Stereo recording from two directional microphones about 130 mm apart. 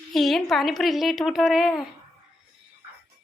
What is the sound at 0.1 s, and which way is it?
A woman's voice, centre (ahead or behind).